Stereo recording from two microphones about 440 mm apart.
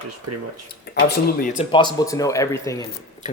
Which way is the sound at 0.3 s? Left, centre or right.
Right.